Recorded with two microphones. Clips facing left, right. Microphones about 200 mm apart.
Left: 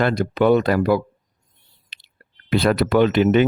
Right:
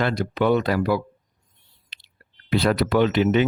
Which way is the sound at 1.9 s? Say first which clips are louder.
Left 1 dB; 55° left (ahead or behind).